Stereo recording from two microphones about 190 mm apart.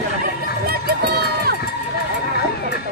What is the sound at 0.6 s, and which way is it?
Crowd, 55° right (ahead or behind).